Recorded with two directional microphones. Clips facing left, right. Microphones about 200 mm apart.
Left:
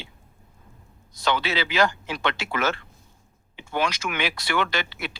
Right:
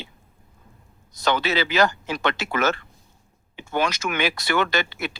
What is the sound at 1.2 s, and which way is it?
Speech, 45° right (ahead or behind).